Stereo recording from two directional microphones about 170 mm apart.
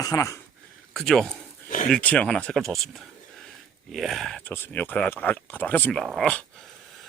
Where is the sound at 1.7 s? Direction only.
50° left (ahead or behind).